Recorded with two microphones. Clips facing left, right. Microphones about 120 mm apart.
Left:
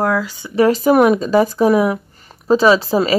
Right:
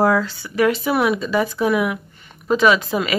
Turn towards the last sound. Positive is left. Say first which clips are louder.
# left 4 dB
turn(degrees=35)  # may be behind; listen again after turning